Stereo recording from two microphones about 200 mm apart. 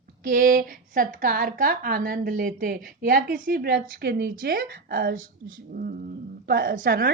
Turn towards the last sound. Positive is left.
turn(degrees=-50)  # may be behind; listen again after turning